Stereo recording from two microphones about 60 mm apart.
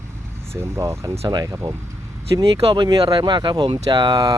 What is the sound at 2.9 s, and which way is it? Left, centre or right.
Speech, right.